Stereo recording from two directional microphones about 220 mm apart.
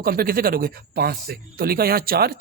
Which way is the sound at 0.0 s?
40° right (ahead or behind).